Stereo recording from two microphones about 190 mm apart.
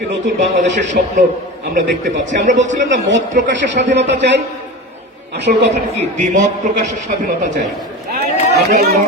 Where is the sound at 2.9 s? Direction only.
70° right (ahead or behind).